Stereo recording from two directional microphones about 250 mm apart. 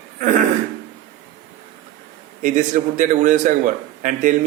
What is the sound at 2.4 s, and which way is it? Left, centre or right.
A man's voice, right.